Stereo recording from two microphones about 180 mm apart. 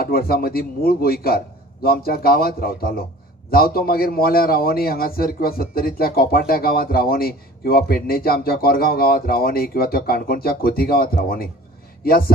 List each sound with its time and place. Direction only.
0.0 s a man's voice: 55° left (ahead or behind)